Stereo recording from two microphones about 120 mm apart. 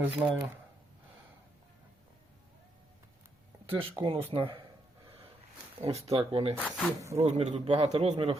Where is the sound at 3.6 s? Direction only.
45° right (ahead or behind).